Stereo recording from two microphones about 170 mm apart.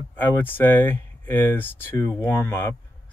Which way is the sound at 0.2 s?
10° left (ahead or behind).